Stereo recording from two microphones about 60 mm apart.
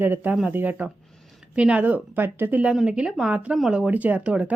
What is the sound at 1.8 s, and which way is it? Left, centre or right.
Speech, right.